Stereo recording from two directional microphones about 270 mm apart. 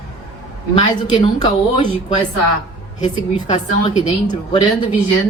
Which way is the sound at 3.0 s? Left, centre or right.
Left.